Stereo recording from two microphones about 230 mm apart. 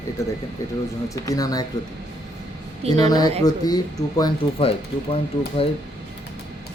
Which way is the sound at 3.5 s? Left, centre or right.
Centre.